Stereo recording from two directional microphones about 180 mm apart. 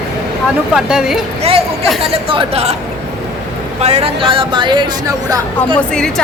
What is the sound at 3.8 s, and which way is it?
Speech, 35° right (ahead or behind).